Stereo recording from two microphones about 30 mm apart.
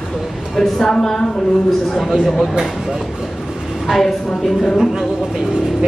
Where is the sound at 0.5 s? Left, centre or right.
Centre.